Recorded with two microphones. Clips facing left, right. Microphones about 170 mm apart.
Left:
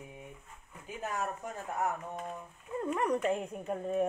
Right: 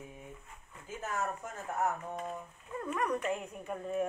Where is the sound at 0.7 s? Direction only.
15° left (ahead or behind).